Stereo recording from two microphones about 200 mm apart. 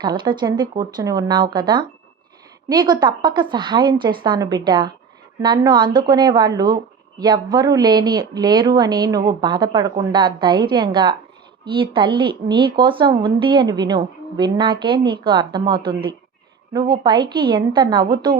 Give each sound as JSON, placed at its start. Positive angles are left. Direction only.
{"t": 0.0, "sound": "a woman's voice", "side_deg": -20}